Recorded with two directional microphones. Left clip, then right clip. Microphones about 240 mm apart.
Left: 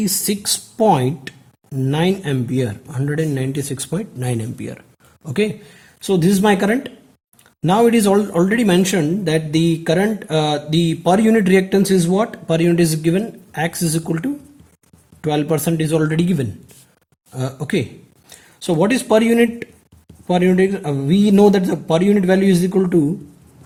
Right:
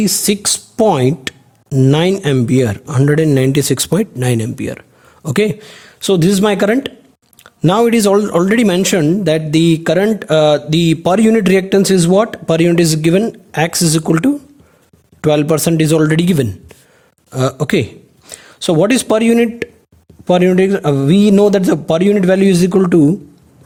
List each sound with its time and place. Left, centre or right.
0.0 s speech: right